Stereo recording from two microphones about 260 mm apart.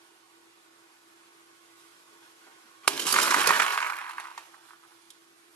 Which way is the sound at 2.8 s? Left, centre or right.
Centre.